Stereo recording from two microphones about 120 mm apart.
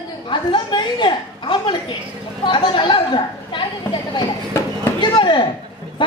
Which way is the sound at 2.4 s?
40° left (ahead or behind).